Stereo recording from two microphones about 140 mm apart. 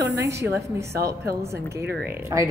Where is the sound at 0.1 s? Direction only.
20° right (ahead or behind).